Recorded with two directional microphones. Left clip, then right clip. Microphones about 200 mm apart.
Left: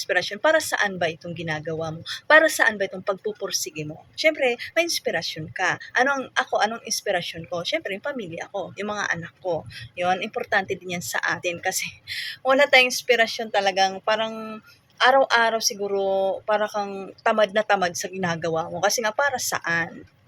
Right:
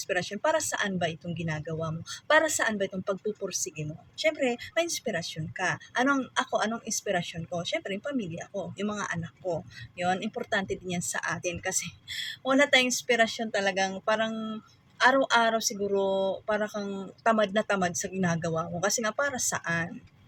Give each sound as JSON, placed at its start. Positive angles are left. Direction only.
{"t": 0.1, "sound": "speech", "side_deg": -15}